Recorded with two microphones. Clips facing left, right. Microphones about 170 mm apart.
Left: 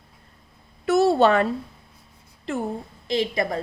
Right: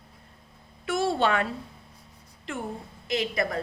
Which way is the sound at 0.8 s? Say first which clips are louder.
Left 8 dB; 40° left (ahead or behind).